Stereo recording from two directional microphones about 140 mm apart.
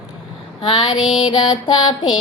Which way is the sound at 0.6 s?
30° left (ahead or behind).